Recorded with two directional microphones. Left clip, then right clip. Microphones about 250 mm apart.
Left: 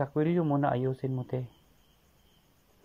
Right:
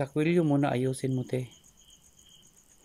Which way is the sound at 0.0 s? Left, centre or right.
Centre.